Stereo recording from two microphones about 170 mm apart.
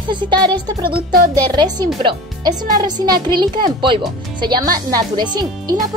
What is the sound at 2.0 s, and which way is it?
Speech, 25° right (ahead or behind).